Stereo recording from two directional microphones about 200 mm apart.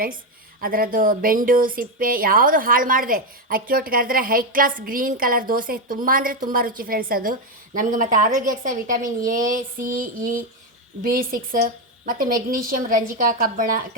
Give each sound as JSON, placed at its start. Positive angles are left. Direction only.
{"t": 0.6, "sound": "speech", "side_deg": -45}